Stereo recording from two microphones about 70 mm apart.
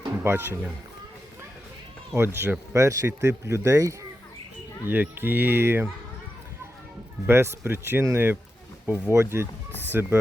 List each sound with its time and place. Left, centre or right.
0.3 s speech: right
2.1 s speech: right
2.7 s speech: right
4.9 s speech: right
7.3 s speech: right